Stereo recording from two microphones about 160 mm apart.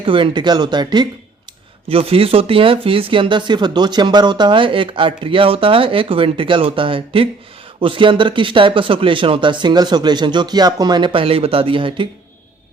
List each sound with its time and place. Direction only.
0.0 s speech: 30° right (ahead or behind)